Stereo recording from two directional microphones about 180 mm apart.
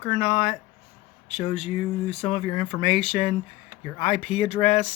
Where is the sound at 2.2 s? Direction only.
35° left (ahead or behind).